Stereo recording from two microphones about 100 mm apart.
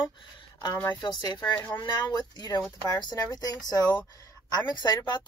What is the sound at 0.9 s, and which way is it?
Speech, 50° left (ahead or behind).